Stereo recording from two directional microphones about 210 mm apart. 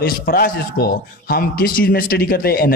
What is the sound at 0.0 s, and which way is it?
A man's voice, 45° left (ahead or behind).